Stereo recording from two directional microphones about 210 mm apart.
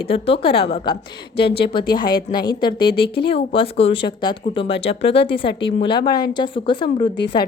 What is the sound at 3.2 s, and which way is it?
Speech, 25° left (ahead or behind).